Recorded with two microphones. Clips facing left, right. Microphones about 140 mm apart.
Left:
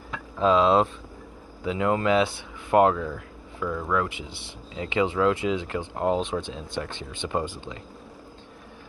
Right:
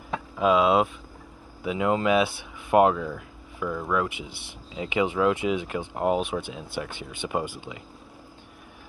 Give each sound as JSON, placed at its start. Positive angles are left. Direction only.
{"t": 0.4, "sound": "speech", "side_deg": -10}